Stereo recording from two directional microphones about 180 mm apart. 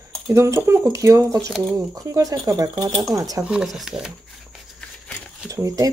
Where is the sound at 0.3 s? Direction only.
15° right (ahead or behind).